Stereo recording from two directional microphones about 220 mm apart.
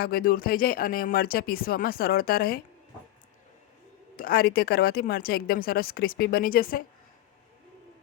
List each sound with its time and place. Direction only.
0.0 s speech: 40° left (ahead or behind)
4.2 s speech: 40° left (ahead or behind)